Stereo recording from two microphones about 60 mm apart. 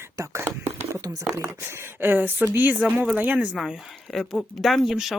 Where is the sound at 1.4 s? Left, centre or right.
Right; by 3.5 s centre.